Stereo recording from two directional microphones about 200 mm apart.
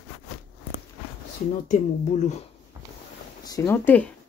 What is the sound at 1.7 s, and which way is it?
Speech, 35° left (ahead or behind).